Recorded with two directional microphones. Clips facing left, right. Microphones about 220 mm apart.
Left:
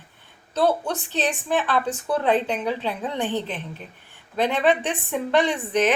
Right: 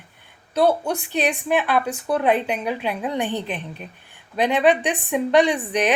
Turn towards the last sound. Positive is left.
turn(degrees=-15)  # may be behind; listen again after turning